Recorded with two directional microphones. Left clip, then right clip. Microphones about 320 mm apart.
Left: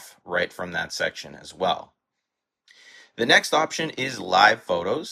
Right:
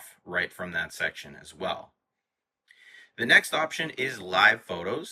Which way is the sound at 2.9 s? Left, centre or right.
Centre.